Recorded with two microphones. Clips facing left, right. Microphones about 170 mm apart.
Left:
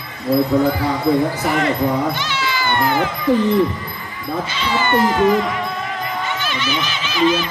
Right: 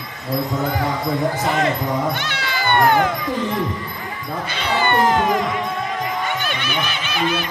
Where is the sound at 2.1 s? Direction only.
55° right (ahead or behind).